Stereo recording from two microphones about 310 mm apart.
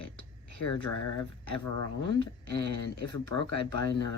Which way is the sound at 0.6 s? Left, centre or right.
Left.